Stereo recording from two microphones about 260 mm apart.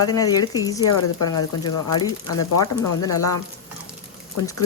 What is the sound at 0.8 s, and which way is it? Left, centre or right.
Speech, left.